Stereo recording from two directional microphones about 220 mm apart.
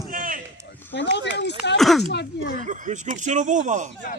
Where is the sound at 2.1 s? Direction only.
50° left (ahead or behind).